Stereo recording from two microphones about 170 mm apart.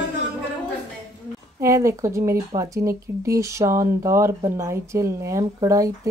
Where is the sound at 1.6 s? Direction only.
20° right (ahead or behind).